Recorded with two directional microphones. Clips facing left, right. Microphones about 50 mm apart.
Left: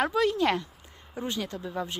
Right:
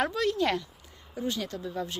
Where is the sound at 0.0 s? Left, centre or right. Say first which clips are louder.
Left 2 dB; centre.